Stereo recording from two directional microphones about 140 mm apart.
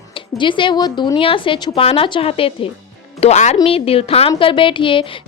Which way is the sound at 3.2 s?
55° left (ahead or behind).